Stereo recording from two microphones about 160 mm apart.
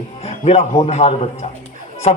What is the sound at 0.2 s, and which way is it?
Music, 40° left (ahead or behind).